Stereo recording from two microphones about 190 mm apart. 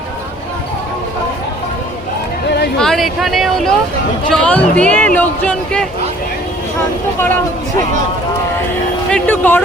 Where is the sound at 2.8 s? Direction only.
Centre (ahead or behind).